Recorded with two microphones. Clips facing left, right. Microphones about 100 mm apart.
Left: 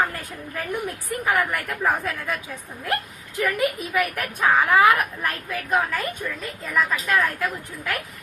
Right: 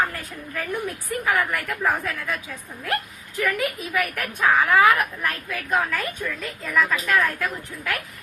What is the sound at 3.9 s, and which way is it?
Speech, 15° left (ahead or behind).